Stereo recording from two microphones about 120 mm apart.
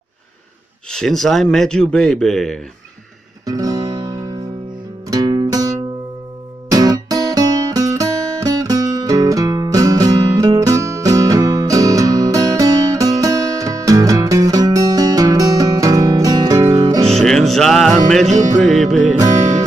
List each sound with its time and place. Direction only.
0.8 s speech: 5° left (ahead or behind)
3.4 s guitar: 30° right (ahead or behind)
5.0 s music: 30° right (ahead or behind)
17.1 s music: 5° left (ahead or behind)
19.1 s music: 30° right (ahead or behind)